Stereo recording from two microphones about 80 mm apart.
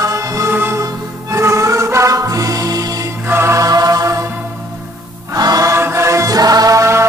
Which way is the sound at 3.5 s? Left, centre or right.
Right.